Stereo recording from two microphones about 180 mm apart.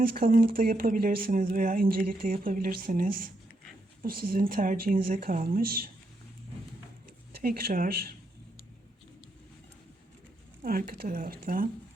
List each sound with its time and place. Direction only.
0.0 s speech: 55° right (ahead or behind)
7.4 s speech: 55° right (ahead or behind)
10.6 s speech: 55° right (ahead or behind)